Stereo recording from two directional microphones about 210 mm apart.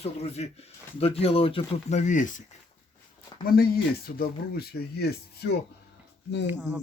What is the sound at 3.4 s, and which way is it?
Speech, 45° left (ahead or behind).